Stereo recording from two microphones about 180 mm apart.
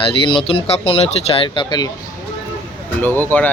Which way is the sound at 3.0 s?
10° left (ahead or behind).